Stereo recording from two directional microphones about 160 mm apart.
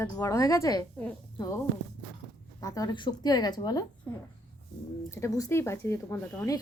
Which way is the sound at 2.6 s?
20° left (ahead or behind).